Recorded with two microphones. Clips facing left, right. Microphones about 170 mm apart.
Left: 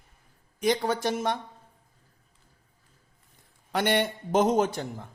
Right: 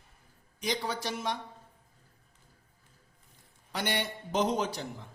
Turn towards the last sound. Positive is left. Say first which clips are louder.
# left 7 dB
turn(degrees=50)  # may be behind; listen again after turning